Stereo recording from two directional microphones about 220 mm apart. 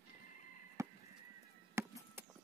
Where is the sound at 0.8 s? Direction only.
15° right (ahead or behind).